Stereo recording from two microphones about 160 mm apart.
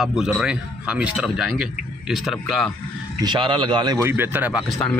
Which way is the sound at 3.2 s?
30° right (ahead or behind).